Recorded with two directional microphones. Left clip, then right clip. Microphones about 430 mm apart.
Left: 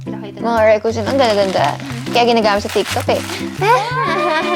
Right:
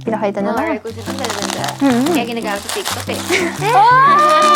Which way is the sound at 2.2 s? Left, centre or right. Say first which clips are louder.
Left 8 dB; left.